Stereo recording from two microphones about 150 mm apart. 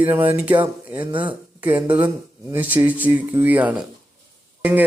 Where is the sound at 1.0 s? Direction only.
35° right (ahead or behind).